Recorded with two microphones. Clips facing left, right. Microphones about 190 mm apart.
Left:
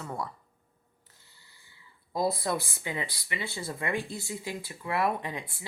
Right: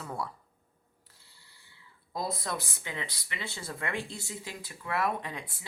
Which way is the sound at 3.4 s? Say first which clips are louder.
Left 4 dB; 25° left (ahead or behind).